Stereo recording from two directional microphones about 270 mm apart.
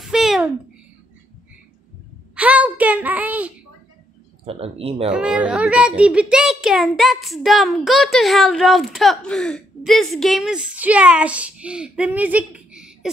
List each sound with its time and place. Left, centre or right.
0.0 s babbling: centre
2.3 s a woman's voice: centre
4.5 s speech: right
5.1 s a woman's voice: centre